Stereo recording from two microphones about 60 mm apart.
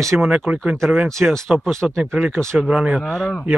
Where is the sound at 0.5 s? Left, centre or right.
Right.